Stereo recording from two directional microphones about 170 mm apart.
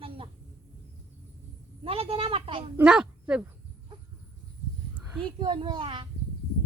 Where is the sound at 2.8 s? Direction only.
5° right (ahead or behind).